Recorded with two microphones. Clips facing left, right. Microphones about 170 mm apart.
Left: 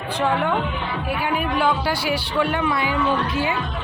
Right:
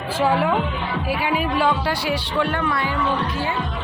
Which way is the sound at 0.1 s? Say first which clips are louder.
Right 2 dB; 5° right (ahead or behind).